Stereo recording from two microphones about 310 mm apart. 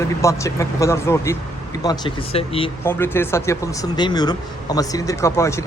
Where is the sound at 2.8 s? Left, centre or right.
Centre.